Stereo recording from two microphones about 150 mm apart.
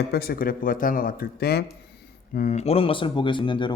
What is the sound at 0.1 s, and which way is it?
Speech, 90° left.